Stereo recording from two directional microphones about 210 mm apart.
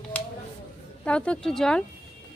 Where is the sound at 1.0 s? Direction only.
5° left (ahead or behind).